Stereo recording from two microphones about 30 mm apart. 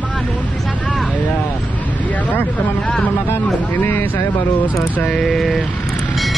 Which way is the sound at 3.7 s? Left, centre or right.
Left.